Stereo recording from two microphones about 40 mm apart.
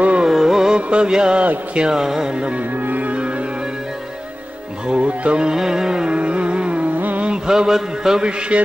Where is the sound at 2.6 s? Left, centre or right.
Right.